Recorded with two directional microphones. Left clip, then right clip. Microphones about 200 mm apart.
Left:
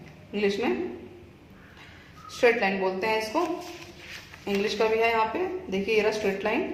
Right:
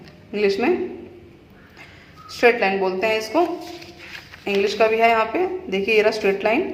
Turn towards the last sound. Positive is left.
turn(degrees=-30)  # may be behind; listen again after turning